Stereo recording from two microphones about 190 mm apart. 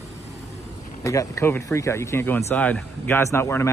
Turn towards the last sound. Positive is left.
turn(degrees=15)  # may be behind; listen again after turning